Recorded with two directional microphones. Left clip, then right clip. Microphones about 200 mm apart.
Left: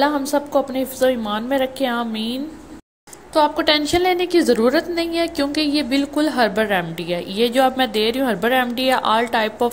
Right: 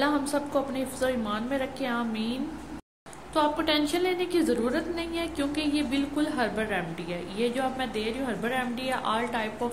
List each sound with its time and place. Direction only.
0.0 s a woman's voice: 30° left (ahead or behind)
3.3 s a woman's voice: 30° left (ahead or behind)